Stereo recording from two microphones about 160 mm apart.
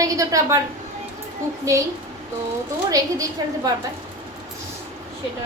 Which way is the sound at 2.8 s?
20° right (ahead or behind).